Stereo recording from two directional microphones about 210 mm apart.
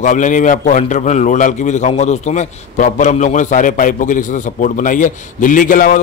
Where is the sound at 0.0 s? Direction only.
35° left (ahead or behind).